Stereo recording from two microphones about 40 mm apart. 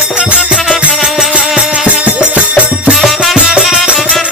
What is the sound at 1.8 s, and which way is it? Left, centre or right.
Music, right.